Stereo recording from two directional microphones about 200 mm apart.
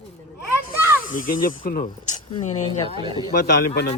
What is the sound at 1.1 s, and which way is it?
Speech, 40° left (ahead or behind).